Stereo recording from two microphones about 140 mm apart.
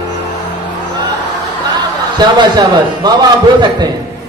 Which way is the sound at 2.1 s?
30° right (ahead or behind).